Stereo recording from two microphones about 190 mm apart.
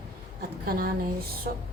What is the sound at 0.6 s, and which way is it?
Speech, 50° right (ahead or behind).